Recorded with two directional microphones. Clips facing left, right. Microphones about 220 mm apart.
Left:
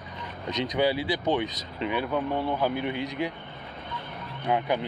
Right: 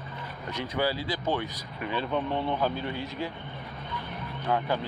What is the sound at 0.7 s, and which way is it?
Speech, 15° left (ahead or behind).